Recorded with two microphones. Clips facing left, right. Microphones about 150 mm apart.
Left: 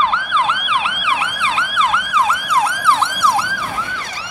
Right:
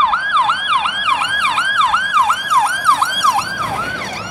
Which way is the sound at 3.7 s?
65° right (ahead or behind).